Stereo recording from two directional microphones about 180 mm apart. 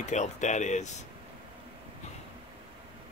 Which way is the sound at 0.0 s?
40° left (ahead or behind).